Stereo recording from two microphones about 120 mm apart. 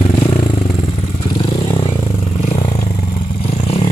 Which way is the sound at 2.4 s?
60° left (ahead or behind).